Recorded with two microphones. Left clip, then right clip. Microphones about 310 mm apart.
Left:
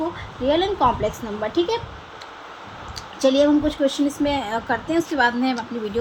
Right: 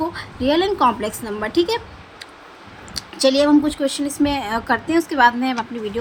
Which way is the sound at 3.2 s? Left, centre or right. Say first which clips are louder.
Right 2 dB; centre.